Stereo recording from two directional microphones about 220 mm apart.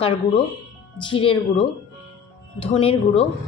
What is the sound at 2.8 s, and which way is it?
Speech, 25° left (ahead or behind).